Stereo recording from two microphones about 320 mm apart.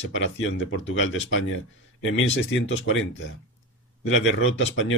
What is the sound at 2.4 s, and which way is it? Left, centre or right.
Speech, left.